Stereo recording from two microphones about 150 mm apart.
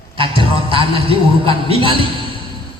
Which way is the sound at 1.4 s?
35° right (ahead or behind).